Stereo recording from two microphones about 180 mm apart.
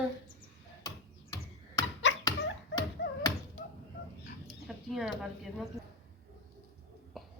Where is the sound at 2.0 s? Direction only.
90° left.